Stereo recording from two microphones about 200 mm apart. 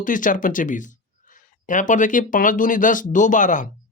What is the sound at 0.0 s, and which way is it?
Speech, 40° left (ahead or behind).